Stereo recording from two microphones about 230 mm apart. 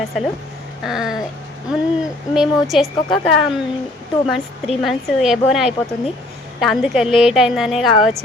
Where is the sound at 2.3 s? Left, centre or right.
Centre.